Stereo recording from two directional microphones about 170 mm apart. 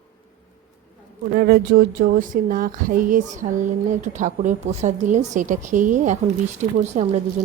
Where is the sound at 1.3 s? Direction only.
65° right (ahead or behind).